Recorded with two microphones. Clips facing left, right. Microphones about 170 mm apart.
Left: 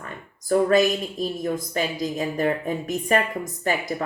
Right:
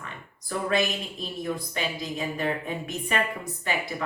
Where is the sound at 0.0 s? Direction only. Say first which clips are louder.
Left 4 dB; 45° left (ahead or behind).